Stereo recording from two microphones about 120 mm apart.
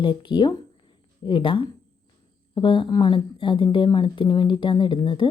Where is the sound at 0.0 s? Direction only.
40° left (ahead or behind).